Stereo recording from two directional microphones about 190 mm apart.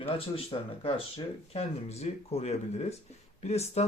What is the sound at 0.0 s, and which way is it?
Speech, 30° left (ahead or behind).